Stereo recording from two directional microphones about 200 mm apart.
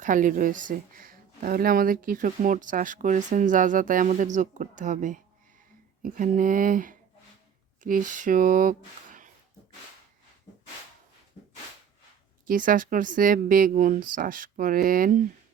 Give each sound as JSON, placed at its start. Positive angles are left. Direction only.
{"t": 0.0, "sound": "speech", "side_deg": -40}
{"t": 12.5, "sound": "speech", "side_deg": -45}